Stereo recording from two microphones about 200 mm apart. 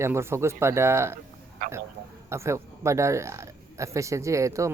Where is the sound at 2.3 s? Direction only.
15° right (ahead or behind).